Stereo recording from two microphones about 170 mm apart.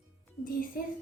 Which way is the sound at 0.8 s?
60° left (ahead or behind).